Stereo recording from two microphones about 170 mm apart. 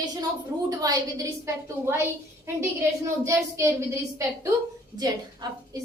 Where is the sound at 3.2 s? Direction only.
15° right (ahead or behind).